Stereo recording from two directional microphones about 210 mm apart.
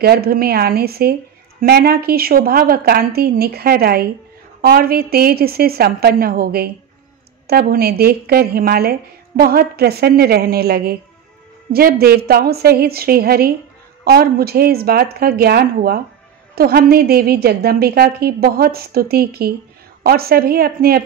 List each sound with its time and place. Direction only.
0.0 s a woman's voice: 45° right (ahead or behind)